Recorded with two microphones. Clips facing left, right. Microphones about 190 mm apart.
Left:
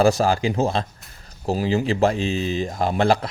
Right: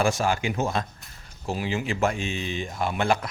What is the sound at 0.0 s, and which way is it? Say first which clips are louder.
Speech: left 6 dB; 35° left (ahead or behind).